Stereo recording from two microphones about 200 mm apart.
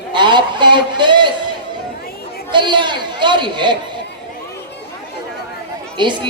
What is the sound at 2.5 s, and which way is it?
Speech, 25° right (ahead or behind).